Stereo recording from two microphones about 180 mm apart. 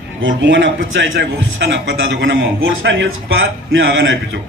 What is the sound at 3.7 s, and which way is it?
Speech, 90° right.